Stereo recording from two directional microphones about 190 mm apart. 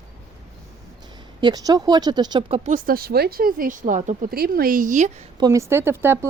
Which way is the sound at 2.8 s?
50° right (ahead or behind).